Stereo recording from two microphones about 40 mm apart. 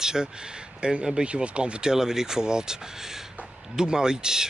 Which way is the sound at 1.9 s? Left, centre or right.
Centre.